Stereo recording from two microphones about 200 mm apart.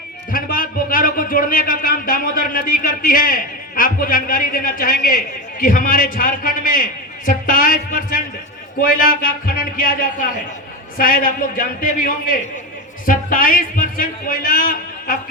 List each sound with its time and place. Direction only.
0.3 s a man's voice: 45° left (ahead or behind)